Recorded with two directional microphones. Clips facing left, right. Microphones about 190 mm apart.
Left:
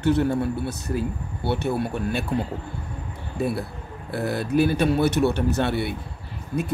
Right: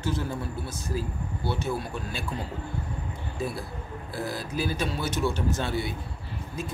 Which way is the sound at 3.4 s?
65° left (ahead or behind).